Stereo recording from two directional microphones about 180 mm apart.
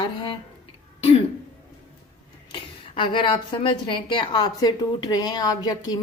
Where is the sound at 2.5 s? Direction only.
30° left (ahead or behind).